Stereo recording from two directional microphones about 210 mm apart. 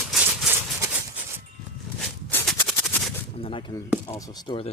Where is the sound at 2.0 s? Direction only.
5° left (ahead or behind).